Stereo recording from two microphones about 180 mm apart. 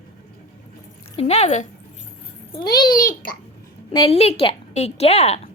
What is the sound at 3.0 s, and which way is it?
Speech, 50° left (ahead or behind).